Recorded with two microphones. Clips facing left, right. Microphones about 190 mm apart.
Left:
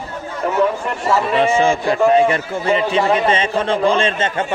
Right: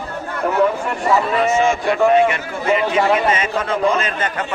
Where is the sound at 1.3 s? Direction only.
30° left (ahead or behind).